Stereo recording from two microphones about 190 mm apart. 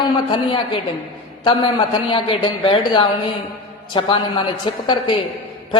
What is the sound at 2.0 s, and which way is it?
A man's voice, 25° left (ahead or behind).